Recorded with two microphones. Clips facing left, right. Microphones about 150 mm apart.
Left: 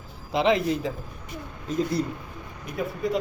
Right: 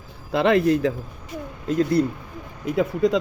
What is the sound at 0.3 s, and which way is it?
Speech, 65° right (ahead or behind).